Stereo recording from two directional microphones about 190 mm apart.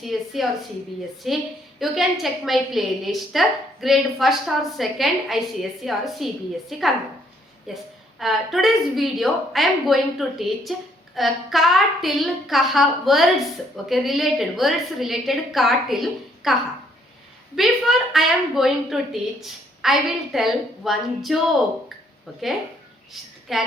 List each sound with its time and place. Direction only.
0.0 s a woman's voice: centre (ahead or behind)